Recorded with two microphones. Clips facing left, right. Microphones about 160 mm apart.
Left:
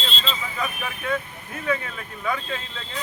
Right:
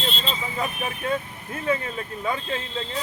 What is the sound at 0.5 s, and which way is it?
Speech, 30° right (ahead or behind).